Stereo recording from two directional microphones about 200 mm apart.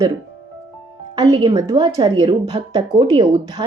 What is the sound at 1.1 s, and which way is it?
A woman's voice, 25° right (ahead or behind).